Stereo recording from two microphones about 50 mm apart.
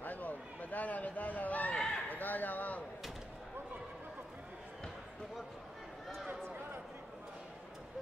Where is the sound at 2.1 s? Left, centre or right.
Left.